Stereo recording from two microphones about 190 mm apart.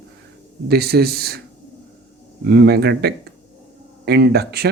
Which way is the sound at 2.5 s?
60° right (ahead or behind).